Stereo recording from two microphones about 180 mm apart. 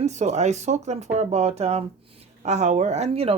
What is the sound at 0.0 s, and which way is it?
Speech, 40° right (ahead or behind).